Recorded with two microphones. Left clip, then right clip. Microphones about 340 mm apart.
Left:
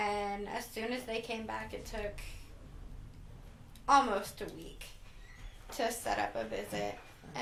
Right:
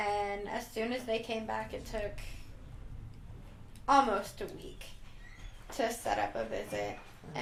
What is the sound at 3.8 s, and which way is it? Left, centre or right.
A woman's voice, right.